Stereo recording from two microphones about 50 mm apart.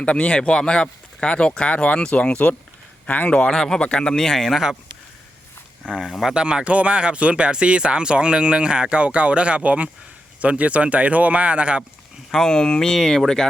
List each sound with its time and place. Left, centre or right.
0.0 s speech: left
3.5 s speech: centre
3.8 s speech: left
4.1 s speech: centre
5.8 s speech: centre
6.3 s speech: centre
12.5 s speech: centre